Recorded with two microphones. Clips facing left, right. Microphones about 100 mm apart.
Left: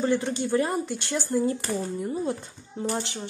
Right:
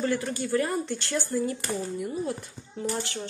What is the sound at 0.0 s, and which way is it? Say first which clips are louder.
Speech: left 3 dB; 25° left (ahead or behind).